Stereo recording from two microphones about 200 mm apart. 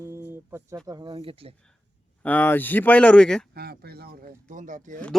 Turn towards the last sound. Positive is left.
turn(degrees=-40)  # may be behind; listen again after turning